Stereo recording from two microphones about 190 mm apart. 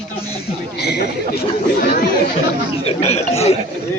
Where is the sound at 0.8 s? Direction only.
60° left (ahead or behind).